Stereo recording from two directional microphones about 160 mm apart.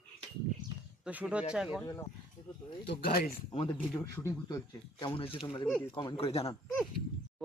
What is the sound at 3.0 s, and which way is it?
Speech, 70° left (ahead or behind).